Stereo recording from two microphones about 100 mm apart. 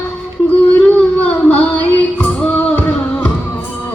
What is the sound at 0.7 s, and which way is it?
Music, 15° left (ahead or behind).